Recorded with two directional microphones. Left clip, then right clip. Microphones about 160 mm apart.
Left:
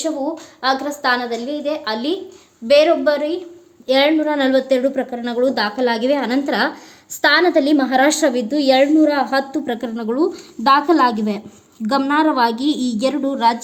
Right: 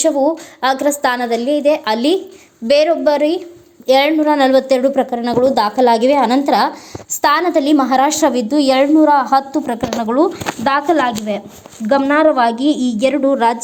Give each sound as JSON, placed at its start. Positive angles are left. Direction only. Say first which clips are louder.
{"t": 0.0, "sound": "a woman's voice", "louder": "right 8 dB", "side_deg": -25}